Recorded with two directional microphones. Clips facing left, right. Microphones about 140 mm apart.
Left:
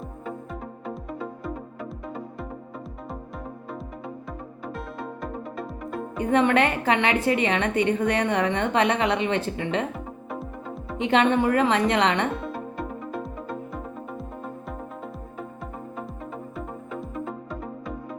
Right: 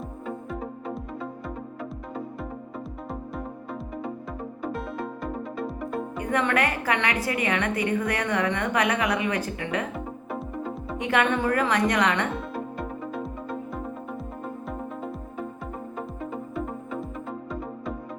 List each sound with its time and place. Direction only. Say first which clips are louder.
0.9 s music: left 4 dB; centre (ahead or behind)
6.1 s a woman's voice: left 5 dB; 25° left (ahead or behind)
9.9 s music: right 1 dB; centre (ahead or behind)
10.9 s a woman's voice: left 4 dB; 25° left (ahead or behind)
12.3 s music: even; centre (ahead or behind)